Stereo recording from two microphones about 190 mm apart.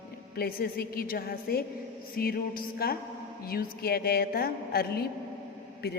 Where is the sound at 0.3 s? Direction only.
55° left (ahead or behind).